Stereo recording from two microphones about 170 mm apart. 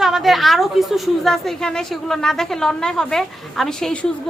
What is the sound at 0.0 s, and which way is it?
A woman's voice, centre (ahead or behind).